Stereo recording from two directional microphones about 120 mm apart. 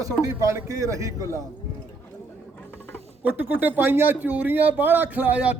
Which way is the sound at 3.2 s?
15° right (ahead or behind).